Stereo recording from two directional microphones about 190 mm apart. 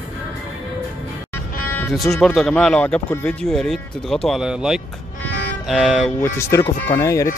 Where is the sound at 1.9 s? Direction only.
Centre (ahead or behind).